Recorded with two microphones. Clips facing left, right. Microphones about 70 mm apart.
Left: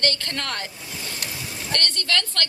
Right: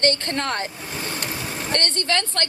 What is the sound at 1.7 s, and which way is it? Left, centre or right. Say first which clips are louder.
Speech: right 2 dB; right.